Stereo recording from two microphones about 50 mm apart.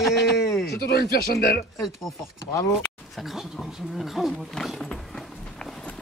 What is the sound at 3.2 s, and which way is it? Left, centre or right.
Speech, centre.